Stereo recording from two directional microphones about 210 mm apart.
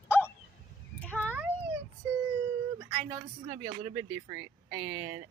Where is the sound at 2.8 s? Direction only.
20° right (ahead or behind).